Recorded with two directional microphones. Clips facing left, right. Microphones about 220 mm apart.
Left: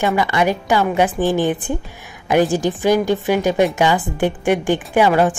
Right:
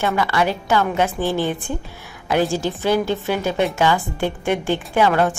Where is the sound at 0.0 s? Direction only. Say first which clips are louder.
Left 2 dB; 15° left (ahead or behind).